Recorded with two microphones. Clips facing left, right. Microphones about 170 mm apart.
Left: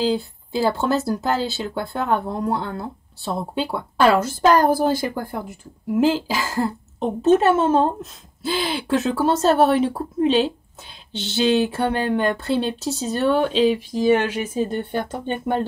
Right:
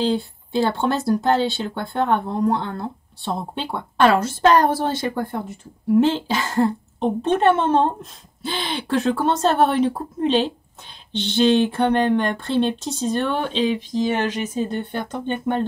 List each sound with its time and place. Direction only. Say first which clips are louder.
0.0 s speech: even; 5° left (ahead or behind)
4.3 s speech: even; 25° right (ahead or behind)
6.1 s speech: right 2 dB; centre (ahead or behind)